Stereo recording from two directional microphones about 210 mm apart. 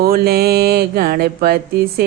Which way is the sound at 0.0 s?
45° right (ahead or behind).